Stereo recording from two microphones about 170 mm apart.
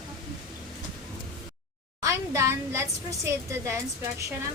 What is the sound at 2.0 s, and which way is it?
A woman's voice, 20° right (ahead or behind).